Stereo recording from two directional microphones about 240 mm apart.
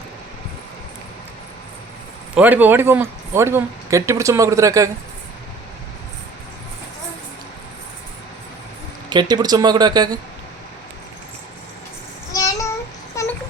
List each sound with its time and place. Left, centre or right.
2.3 s speech: centre
9.0 s speech: centre
12.3 s a sound: centre